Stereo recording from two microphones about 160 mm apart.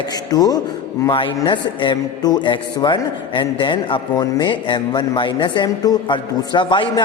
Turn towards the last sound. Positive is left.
turn(degrees=30)  # may be behind; listen again after turning